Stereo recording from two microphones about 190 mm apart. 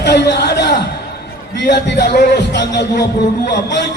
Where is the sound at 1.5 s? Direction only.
60° left (ahead or behind).